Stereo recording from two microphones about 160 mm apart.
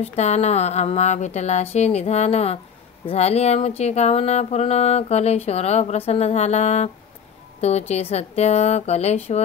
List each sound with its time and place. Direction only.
0.0 s a woman's voice: 45° left (ahead or behind)
3.1 s mantra: 40° left (ahead or behind)
7.9 s a woman's voice: 40° left (ahead or behind)